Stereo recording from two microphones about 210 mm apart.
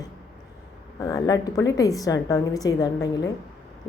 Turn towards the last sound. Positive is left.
turn(degrees=15)  # may be behind; listen again after turning